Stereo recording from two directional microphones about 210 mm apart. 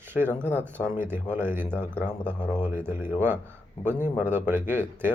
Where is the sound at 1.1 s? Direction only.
10° right (ahead or behind).